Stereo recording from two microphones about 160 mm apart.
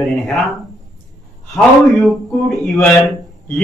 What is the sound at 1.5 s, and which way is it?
A man's voice, centre (ahead or behind).